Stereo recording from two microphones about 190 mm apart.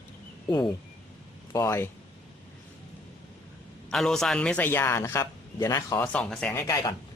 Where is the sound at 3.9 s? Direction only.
5° left (ahead or behind).